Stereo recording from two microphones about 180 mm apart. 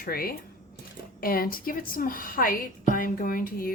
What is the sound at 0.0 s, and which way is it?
A woman's voice, 55° left (ahead or behind).